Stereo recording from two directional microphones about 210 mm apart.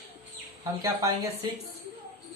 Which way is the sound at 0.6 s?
15° right (ahead or behind).